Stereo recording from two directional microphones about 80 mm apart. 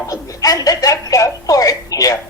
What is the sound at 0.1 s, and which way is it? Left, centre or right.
A woman's voice, left.